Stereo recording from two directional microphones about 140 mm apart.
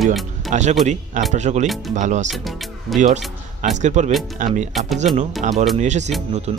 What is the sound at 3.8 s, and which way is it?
Speech, 60° right (ahead or behind).